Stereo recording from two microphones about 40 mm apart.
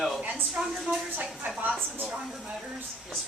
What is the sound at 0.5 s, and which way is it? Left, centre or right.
Speech, right.